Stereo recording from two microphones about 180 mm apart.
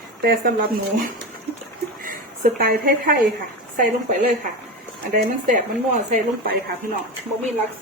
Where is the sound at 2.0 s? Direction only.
50° right (ahead or behind).